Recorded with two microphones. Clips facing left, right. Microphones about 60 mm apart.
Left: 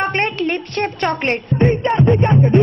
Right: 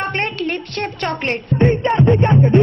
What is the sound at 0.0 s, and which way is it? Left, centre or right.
A woman's voice, centre.